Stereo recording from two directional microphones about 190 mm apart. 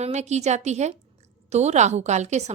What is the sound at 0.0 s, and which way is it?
A woman's voice, 35° right (ahead or behind).